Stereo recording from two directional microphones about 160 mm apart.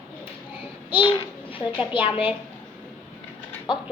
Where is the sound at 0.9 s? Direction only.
30° left (ahead or behind).